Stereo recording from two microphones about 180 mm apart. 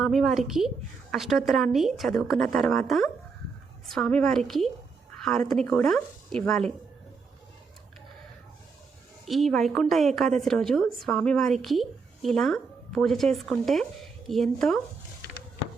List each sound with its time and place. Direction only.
0.0 s a woman's voice: centre (ahead or behind)
9.2 s a woman's voice: centre (ahead or behind)